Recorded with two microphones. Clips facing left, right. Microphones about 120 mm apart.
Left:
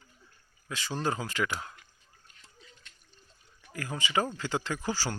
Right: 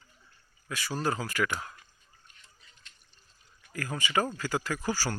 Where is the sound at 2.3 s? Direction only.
90° left.